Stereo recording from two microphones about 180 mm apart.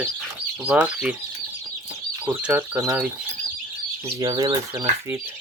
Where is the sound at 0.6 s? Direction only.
5° right (ahead or behind).